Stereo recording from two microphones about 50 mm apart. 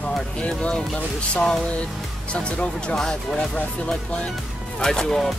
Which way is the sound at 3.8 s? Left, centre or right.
Left.